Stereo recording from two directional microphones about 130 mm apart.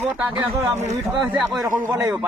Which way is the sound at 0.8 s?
60° right (ahead or behind).